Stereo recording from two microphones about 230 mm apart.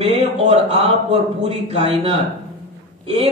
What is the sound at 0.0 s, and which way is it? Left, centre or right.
Speech, right.